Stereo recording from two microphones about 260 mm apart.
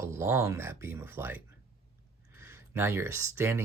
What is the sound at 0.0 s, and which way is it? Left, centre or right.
Speech, centre.